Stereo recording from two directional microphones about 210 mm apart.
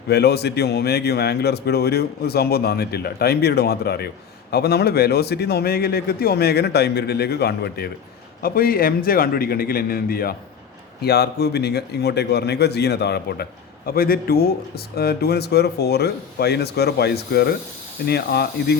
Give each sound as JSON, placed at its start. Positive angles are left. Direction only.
{"t": 0.1, "sound": "a man's voice", "side_deg": 50}